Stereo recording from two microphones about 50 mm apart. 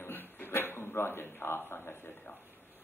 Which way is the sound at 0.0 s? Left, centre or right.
Left.